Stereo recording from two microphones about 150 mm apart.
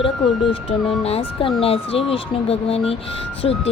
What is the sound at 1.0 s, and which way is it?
Speech, 40° left (ahead or behind).